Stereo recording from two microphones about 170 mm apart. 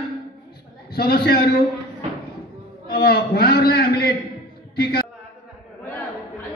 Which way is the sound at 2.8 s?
65° left (ahead or behind).